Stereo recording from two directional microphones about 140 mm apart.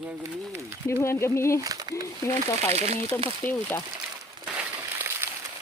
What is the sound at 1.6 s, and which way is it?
Speech, 25° right (ahead or behind).